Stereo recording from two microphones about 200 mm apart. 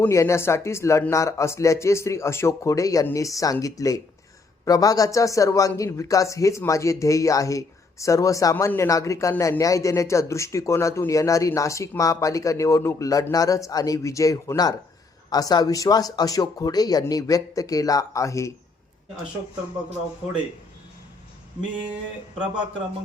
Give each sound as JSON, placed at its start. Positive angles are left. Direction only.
{"t": 0.0, "sound": "speech", "side_deg": 15}